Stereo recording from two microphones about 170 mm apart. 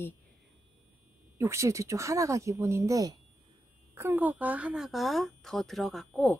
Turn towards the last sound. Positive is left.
turn(degrees=0)  # may be behind; listen again after turning